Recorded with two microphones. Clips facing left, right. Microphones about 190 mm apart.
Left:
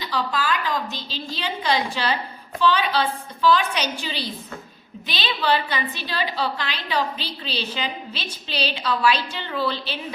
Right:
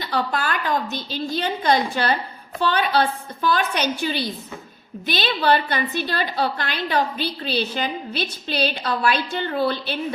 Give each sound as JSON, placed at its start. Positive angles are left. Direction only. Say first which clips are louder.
{"t": 0.0, "sound": "a woman's voice", "louder": "right 1 dB", "side_deg": -55}